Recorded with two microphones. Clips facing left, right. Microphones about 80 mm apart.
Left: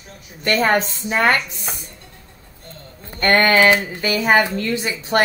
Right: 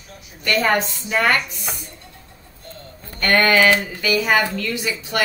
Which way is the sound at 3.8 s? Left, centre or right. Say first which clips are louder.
Left 1 dB; left.